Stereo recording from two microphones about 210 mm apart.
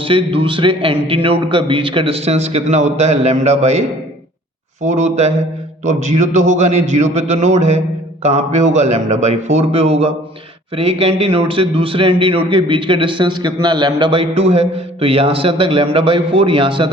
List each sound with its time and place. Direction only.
0.1 s a man's voice: 25° right (ahead or behind)